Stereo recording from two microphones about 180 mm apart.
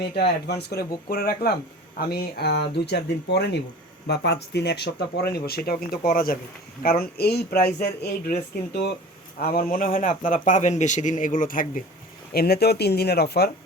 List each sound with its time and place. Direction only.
0.0 s a man's voice: 65° left (ahead or behind); by 11.8 s 50° left (ahead or behind)
12.3 s speech: 60° left (ahead or behind)